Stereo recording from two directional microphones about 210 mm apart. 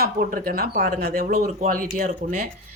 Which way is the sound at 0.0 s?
45° right (ahead or behind).